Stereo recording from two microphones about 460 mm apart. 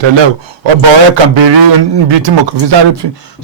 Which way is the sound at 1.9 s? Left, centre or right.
Right.